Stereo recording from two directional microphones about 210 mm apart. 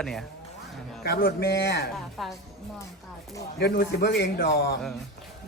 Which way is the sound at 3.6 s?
45° left (ahead or behind).